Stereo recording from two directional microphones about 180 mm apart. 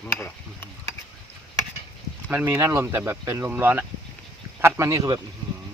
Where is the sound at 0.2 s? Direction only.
10° left (ahead or behind).